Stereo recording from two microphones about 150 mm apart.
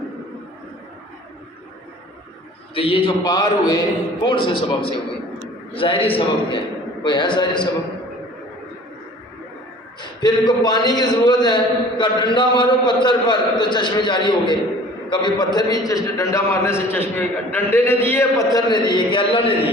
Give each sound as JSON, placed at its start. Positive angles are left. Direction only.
{"t": 2.7, "sound": "a man's voice", "side_deg": 35}
{"t": 10.0, "sound": "a man's voice", "side_deg": 30}